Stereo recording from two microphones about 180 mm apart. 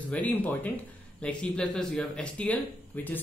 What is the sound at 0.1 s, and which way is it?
Speech, 10° left (ahead or behind).